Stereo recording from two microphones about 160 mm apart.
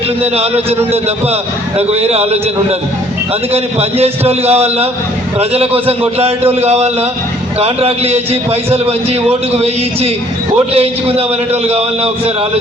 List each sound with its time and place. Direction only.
0.2 s a man's voice: 40° right (ahead or behind)
1.9 s a man's voice: 40° right (ahead or behind)